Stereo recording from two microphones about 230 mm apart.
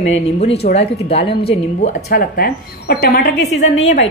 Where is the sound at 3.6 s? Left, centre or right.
Left.